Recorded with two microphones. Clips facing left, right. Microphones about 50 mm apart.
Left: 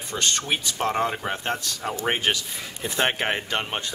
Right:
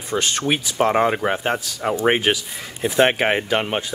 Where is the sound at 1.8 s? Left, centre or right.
Right.